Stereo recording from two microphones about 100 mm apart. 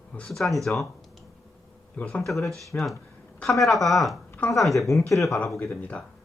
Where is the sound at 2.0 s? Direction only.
10° left (ahead or behind).